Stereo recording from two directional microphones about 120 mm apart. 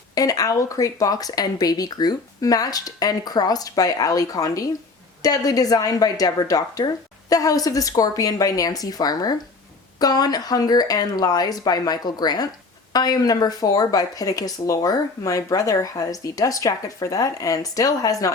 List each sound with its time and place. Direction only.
0.1 s speech: 30° left (ahead or behind)